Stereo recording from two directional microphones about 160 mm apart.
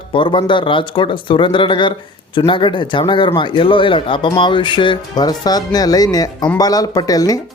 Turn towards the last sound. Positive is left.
turn(degrees=25)  # may be behind; listen again after turning